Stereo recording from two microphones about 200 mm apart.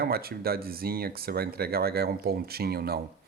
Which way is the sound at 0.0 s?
50° right (ahead or behind).